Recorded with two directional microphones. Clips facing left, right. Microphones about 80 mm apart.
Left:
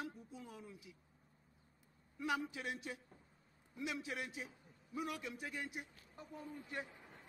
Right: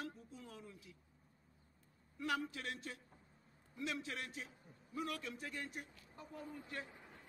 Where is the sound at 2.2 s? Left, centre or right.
Centre.